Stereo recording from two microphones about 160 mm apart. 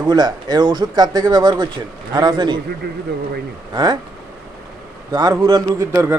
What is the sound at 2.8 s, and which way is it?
Speech, 90° right.